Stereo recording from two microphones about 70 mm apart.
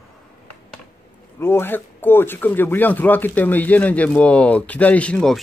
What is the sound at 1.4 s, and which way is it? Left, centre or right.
Speech, left.